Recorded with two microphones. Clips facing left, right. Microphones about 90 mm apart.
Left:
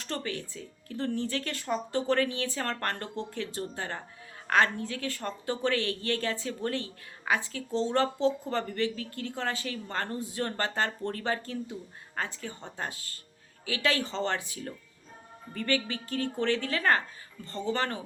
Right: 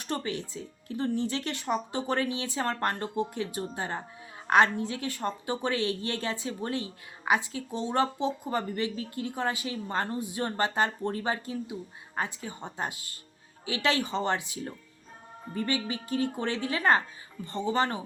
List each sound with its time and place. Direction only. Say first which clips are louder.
0.0 s a woman's voice: right 2 dB; 20° right (ahead or behind)